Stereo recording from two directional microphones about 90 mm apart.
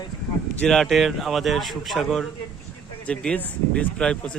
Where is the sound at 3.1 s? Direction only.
15° left (ahead or behind).